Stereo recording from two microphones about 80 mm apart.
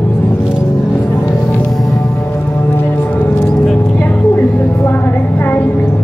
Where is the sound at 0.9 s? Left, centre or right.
Left.